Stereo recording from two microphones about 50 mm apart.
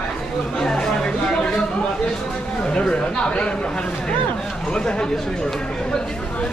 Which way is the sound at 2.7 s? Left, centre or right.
Centre.